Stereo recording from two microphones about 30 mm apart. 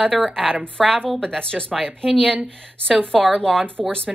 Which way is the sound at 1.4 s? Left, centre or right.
Left.